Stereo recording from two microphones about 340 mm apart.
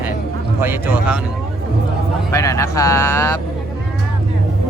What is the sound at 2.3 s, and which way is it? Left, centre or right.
Speech, centre.